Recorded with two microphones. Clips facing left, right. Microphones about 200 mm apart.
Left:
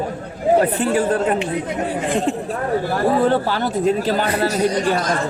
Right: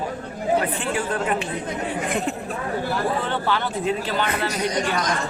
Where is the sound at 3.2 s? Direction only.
40° left (ahead or behind).